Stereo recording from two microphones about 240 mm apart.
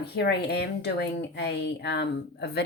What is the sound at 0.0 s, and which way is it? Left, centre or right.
A woman's voice, left.